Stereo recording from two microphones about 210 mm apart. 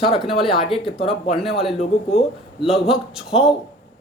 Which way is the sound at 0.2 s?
Centre (ahead or behind).